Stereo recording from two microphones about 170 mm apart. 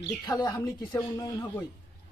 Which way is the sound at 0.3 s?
25° left (ahead or behind).